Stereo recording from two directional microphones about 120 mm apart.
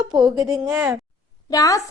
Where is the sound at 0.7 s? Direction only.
15° right (ahead or behind).